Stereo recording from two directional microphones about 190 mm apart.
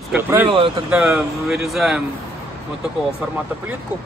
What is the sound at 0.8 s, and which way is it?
Speech, 5° right (ahead or behind).